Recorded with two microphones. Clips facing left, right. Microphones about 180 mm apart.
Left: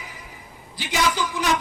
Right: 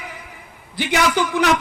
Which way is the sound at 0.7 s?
65° right (ahead or behind).